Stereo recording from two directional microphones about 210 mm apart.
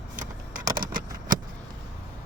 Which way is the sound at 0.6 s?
20° right (ahead or behind).